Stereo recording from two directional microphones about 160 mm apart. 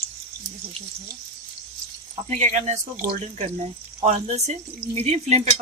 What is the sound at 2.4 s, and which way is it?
Speech, 45° right (ahead or behind).